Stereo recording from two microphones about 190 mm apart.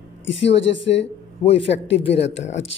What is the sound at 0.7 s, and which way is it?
Speech, 70° left (ahead or behind).